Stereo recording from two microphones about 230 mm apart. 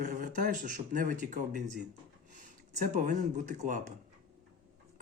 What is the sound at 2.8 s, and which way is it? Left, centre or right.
Speech, right.